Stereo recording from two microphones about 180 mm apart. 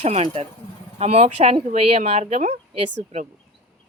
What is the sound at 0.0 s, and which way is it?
Speech, 35° right (ahead or behind).